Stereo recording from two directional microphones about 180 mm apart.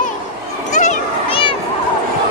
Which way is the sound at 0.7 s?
40° left (ahead or behind).